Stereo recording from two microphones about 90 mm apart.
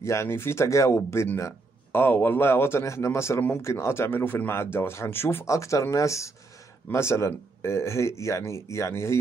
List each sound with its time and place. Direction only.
0.0 s speech: 30° left (ahead or behind)